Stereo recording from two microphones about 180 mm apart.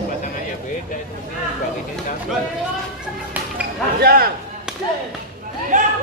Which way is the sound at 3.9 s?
55° right (ahead or behind).